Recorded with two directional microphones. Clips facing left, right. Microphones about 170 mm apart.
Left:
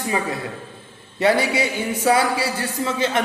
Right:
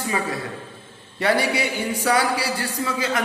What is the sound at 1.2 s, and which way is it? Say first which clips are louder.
A man's voice: left 2 dB; 25° left (ahead or behind).